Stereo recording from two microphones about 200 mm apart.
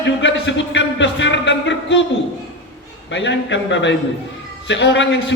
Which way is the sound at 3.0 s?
65° left (ahead or behind).